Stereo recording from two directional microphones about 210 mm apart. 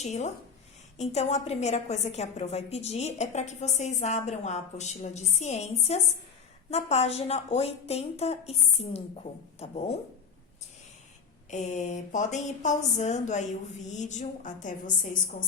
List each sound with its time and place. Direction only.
0.0 s a woman's voice: 30° left (ahead or behind)
11.5 s a woman's voice: 35° left (ahead or behind)